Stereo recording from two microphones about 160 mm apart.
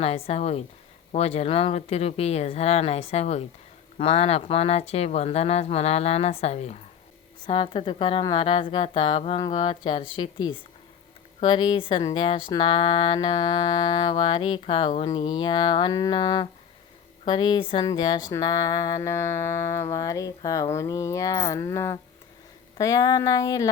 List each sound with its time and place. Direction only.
0.0 s speech: 40° left (ahead or behind)
7.4 s speech: 30° left (ahead or behind)